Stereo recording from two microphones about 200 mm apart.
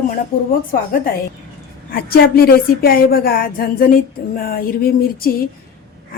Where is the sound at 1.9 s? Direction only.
50° left (ahead or behind).